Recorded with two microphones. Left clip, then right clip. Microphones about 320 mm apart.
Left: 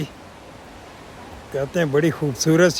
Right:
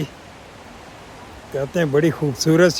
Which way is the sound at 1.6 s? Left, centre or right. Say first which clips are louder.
Right 1 dB; centre.